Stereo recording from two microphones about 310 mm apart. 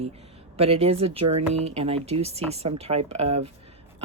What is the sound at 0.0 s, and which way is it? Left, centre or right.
Speech, centre.